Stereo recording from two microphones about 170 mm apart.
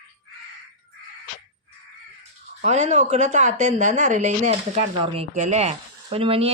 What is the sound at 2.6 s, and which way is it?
A woman's voice, 40° right (ahead or behind).